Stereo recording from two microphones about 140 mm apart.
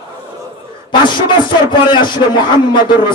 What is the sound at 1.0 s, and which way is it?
A man's voice, 35° left (ahead or behind).